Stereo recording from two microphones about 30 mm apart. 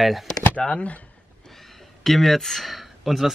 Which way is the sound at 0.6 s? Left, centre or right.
Left.